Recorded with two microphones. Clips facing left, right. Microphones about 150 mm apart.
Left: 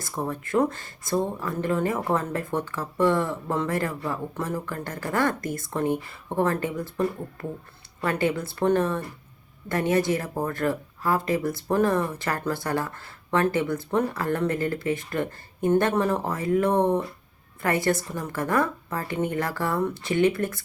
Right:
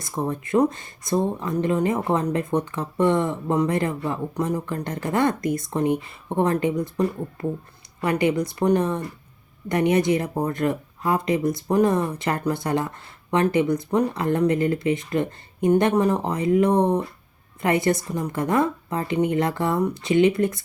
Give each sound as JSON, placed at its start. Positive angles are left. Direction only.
{"t": 0.0, "sound": "speech", "side_deg": -20}